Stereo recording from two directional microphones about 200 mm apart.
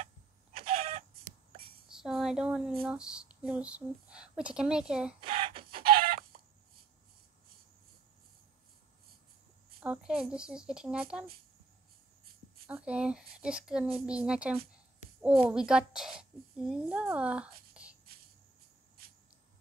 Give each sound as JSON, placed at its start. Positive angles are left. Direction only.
{"t": 0.6, "sound": "chicken", "side_deg": -30}
{"t": 1.9, "sound": "a sound", "side_deg": 0}
{"t": 2.8, "sound": "speech", "side_deg": -5}
{"t": 5.2, "sound": "a sound", "side_deg": -25}
{"t": 5.9, "sound": "chicken", "side_deg": -45}
{"t": 9.8, "sound": "speech", "side_deg": -5}
{"t": 12.6, "sound": "a child's voice", "side_deg": -5}